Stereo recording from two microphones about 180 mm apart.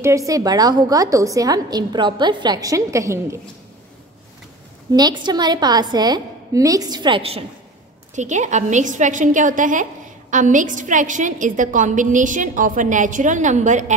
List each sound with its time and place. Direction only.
0.3 s a woman's voice: 20° right (ahead or behind)
4.9 s a woman's voice: 25° right (ahead or behind)
8.2 s a woman's voice: 40° right (ahead or behind)